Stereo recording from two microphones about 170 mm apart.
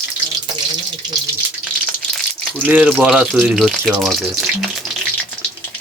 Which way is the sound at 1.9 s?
5° left (ahead or behind).